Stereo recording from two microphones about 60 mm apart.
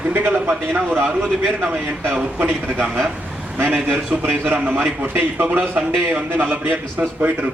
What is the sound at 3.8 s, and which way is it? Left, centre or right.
A man's voice, right.